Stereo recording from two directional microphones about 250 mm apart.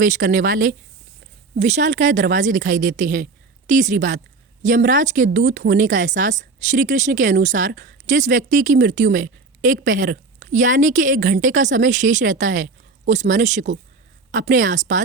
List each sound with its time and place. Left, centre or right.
0.0 s a woman's voice: right